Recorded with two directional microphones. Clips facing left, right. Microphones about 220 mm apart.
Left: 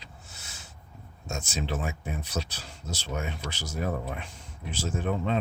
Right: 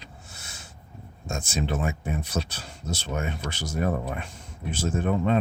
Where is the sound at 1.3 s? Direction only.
50° right (ahead or behind).